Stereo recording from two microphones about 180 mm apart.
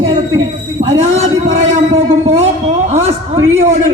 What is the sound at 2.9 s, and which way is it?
Speech, 35° right (ahead or behind).